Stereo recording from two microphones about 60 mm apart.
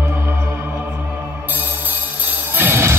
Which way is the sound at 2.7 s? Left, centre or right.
Right.